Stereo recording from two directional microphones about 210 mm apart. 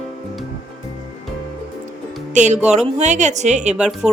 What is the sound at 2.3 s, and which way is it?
Music, 35° right (ahead or behind).